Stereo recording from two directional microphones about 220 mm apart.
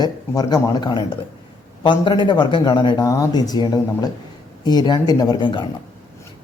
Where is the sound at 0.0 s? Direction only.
20° left (ahead or behind).